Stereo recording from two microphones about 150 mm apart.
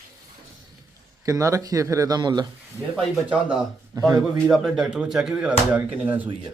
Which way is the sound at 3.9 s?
20° right (ahead or behind).